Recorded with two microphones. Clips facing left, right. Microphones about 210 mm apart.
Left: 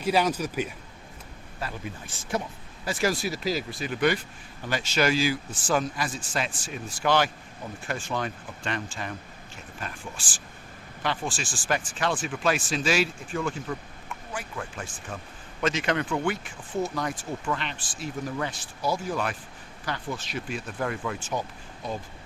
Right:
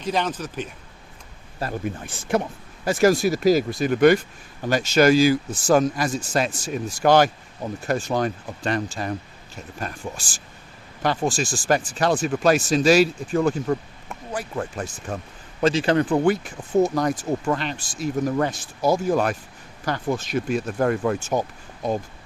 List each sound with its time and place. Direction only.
0.0 s speech: 10° left (ahead or behind)
1.5 s speech: 45° right (ahead or behind)